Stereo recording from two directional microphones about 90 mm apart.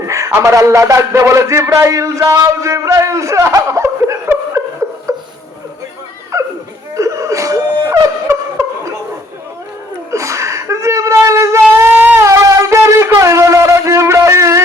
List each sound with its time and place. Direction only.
0.0 s a man's voice: 35° right (ahead or behind)
5.1 s a sound: 35° right (ahead or behind)
6.3 s bow-wow: 35° right (ahead or behind)
6.9 s laughter: 35° right (ahead or behind)
10.1 s shofar: 35° right (ahead or behind)
12.2 s shofar: 35° right (ahead or behind)